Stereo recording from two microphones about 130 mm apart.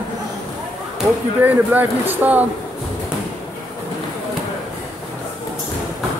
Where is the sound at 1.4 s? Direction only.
15° right (ahead or behind).